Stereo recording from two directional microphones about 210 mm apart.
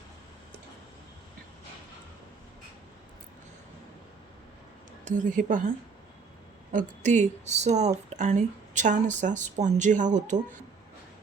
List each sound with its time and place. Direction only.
5.0 s speech: 35° right (ahead or behind)